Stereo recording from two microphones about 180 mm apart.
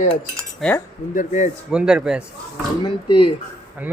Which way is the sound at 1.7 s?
5° right (ahead or behind).